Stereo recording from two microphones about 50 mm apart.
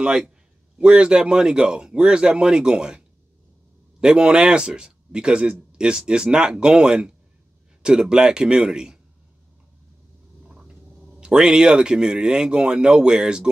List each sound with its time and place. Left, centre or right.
0.0 s speech: centre
4.0 s speech: centre
10.5 s speech: centre